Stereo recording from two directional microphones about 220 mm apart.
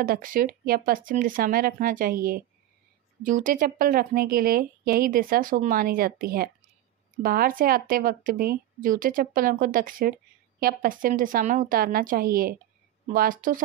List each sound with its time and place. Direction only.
0.0 s a woman's voice: 40° right (ahead or behind)